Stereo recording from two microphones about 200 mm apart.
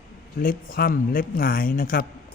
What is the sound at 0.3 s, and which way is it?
Speech, 45° left (ahead or behind).